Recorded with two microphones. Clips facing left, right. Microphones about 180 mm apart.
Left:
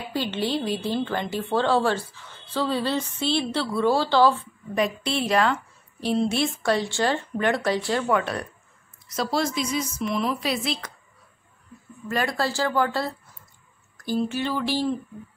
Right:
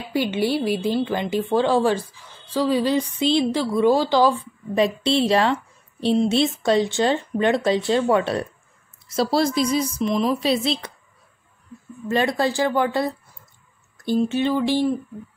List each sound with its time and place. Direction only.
0.1 s a woman's voice: 10° right (ahead or behind)
4.7 s a woman's voice: 25° right (ahead or behind)
10.0 s speech: 20° right (ahead or behind)
12.1 s speech: 20° right (ahead or behind)